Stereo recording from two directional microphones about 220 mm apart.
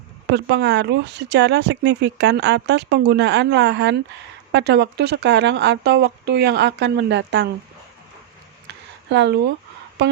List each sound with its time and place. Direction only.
0.3 s speech: 50° right (ahead or behind)
9.0 s speech: 50° right (ahead or behind)